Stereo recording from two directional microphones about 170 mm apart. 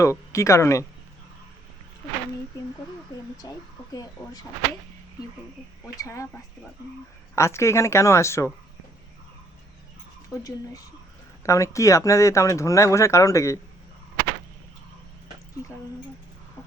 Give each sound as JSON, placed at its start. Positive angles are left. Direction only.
{"t": 0.0, "sound": "speech", "side_deg": 15}
{"t": 3.9, "sound": "speech", "side_deg": 20}
{"t": 5.8, "sound": "speech", "side_deg": 15}
{"t": 7.3, "sound": "speech", "side_deg": 15}
{"t": 10.3, "sound": "speech", "side_deg": 20}